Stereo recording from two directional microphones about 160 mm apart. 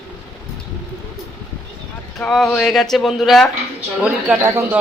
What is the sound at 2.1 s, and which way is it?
Speech, centre (ahead or behind).